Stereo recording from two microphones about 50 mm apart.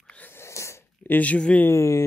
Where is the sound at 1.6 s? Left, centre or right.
Left.